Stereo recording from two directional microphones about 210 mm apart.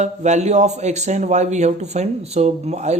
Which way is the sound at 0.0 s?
35° right (ahead or behind).